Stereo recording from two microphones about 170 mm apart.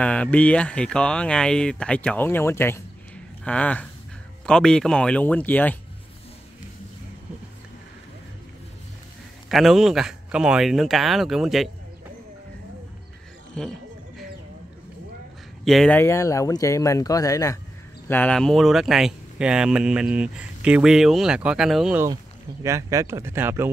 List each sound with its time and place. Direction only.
0.0 s speech: 5° left (ahead or behind)
9.5 s speech: centre (ahead or behind)
15.6 s speech: centre (ahead or behind)
16.0 s speech: 15° left (ahead or behind); by 22.0 s 5° right (ahead or behind)
22.0 s speech: 20° right (ahead or behind)